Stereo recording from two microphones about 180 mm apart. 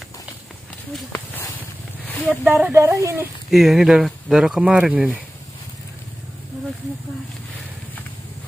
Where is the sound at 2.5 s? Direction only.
15° right (ahead or behind).